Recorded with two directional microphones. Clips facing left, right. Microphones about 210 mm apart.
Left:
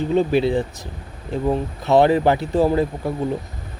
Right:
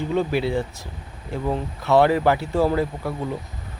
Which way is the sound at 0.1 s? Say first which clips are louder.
Left 5 dB; 20° left (ahead or behind).